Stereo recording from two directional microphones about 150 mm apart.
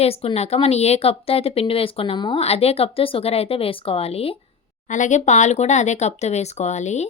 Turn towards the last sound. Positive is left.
turn(degrees=50)  # may be behind; listen again after turning